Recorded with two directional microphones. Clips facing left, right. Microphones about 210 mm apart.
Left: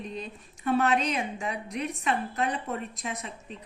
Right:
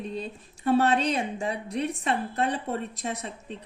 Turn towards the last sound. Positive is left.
turn(degrees=-35)  # may be behind; listen again after turning